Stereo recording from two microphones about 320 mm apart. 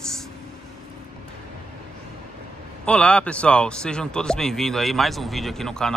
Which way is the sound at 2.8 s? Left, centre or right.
Centre.